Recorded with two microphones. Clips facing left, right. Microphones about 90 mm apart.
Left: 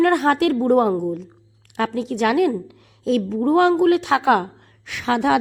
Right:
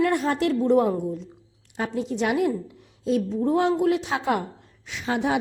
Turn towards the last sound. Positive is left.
turn(degrees=90)